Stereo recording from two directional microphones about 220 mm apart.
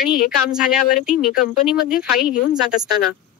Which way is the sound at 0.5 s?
5° right (ahead or behind).